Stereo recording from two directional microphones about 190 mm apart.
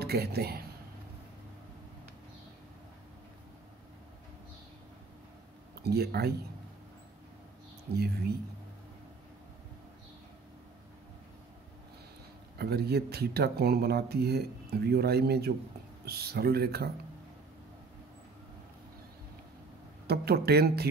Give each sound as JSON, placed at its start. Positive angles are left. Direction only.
{"t": 0.0, "sound": "speech", "side_deg": -55}
{"t": 5.8, "sound": "speech", "side_deg": -55}
{"t": 7.9, "sound": "speech", "side_deg": -55}
{"t": 12.5, "sound": "speech", "side_deg": -55}
{"t": 20.1, "sound": "speech", "side_deg": -55}